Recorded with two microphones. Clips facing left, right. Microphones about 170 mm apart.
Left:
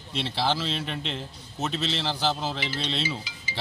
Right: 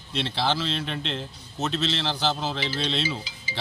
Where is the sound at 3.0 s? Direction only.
30° right (ahead or behind).